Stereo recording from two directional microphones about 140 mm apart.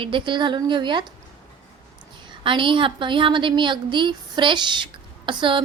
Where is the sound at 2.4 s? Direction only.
35° right (ahead or behind).